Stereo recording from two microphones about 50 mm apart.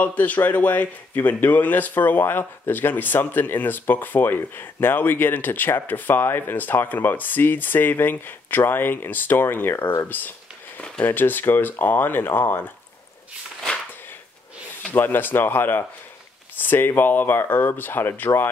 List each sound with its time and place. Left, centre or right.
0.0 s speech: left
14.9 s speech: left